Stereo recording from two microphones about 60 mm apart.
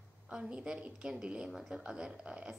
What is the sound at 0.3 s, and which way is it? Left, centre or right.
Speech, centre.